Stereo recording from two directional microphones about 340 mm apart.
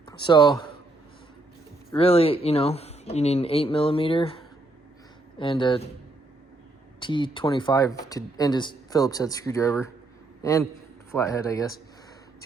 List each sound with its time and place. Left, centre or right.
0.1 s speech: centre
1.9 s speech: centre
7.0 s speech: centre